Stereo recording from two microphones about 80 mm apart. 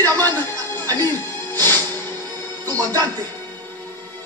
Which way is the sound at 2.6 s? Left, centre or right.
Right.